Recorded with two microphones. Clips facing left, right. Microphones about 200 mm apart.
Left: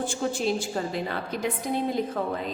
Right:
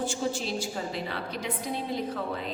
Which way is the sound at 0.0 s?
55° left (ahead or behind).